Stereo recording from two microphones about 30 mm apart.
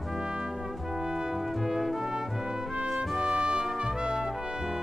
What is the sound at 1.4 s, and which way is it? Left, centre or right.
Music, centre.